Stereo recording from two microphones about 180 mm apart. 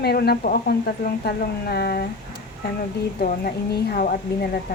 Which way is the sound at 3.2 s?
60° left (ahead or behind).